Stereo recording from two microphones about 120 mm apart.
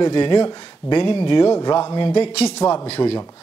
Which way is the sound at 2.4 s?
30° left (ahead or behind).